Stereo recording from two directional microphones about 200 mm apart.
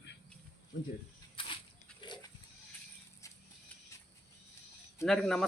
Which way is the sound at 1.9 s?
20° left (ahead or behind).